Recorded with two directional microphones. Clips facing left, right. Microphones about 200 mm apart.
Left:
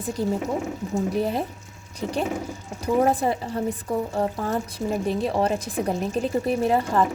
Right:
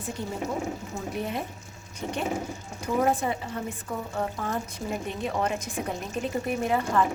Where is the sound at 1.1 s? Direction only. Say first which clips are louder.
Left 7 dB; 35° left (ahead or behind).